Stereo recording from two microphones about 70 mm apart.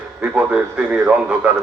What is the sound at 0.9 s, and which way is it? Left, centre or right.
Speech, right.